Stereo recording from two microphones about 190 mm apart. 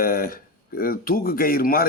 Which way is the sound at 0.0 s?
50° left (ahead or behind).